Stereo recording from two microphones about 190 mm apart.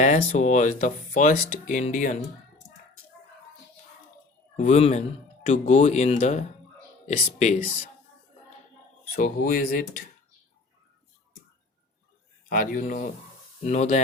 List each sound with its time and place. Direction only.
0.0 s speech: 40° left (ahead or behind)
4.5 s speech: 35° left (ahead or behind)
9.1 s speech: 45° left (ahead or behind)
12.5 s speech: 45° left (ahead or behind)